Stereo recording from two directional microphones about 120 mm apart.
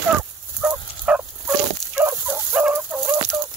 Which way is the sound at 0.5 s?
10° right (ahead or behind).